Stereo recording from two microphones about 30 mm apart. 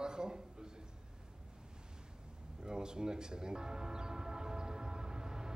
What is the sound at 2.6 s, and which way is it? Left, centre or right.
Speech, right.